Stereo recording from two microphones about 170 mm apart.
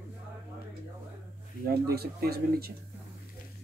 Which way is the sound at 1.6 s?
65° right (ahead or behind).